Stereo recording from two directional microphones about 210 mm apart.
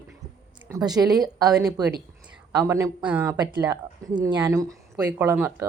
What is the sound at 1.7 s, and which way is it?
A woman's voice, 20° right (ahead or behind).